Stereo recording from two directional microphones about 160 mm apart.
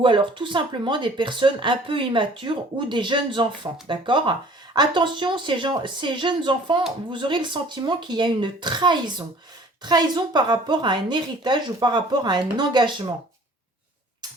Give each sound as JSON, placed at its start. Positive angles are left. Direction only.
{"t": 0.0, "sound": "speech", "side_deg": -30}